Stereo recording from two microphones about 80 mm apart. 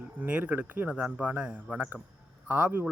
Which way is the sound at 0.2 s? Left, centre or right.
Centre.